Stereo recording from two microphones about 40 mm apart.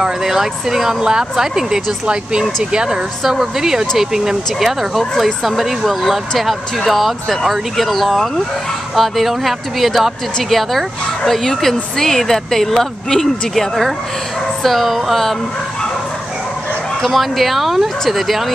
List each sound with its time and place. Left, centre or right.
0.0 s speech: centre
3.3 s speech: centre
17.0 s speech: centre